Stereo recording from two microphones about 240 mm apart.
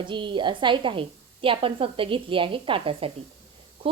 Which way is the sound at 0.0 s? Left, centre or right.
Centre.